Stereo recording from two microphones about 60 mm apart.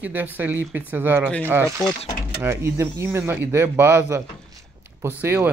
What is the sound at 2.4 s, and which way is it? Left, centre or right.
Speech, right.